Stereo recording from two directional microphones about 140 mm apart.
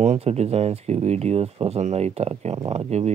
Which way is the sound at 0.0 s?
50° right (ahead or behind).